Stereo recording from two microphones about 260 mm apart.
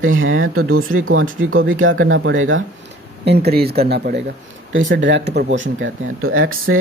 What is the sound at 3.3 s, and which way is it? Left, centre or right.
Speech, right.